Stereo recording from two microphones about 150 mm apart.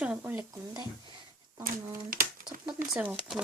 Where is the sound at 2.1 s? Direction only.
70° right (ahead or behind).